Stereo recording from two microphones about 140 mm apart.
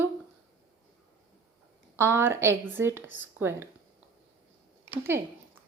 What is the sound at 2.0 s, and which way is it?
A woman's voice, 15° right (ahead or behind).